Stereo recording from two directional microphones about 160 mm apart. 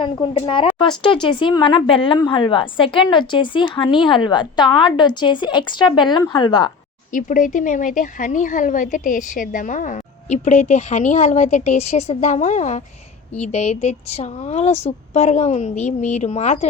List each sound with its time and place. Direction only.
0.0 s a woman's voice: 30° left (ahead or behind)
7.1 s speech: 55° left (ahead or behind)